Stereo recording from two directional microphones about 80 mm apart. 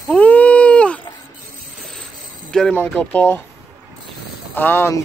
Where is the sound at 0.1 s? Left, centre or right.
Centre.